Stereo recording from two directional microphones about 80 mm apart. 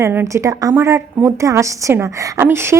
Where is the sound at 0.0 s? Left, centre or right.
Right.